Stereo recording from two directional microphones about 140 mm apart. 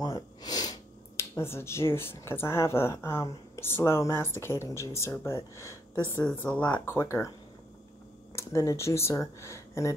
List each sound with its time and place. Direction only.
0.0 s speech: 25° left (ahead or behind)
8.4 s speech: 20° left (ahead or behind)